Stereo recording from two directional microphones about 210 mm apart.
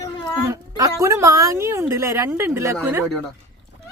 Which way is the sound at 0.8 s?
15° right (ahead or behind).